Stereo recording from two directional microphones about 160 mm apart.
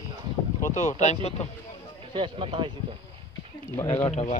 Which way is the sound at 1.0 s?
45° left (ahead or behind).